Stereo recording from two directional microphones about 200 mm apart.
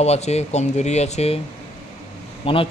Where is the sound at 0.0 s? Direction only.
35° left (ahead or behind).